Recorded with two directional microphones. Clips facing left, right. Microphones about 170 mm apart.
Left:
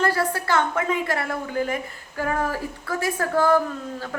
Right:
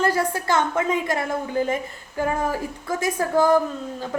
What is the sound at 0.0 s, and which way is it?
A woman's voice, 15° right (ahead or behind).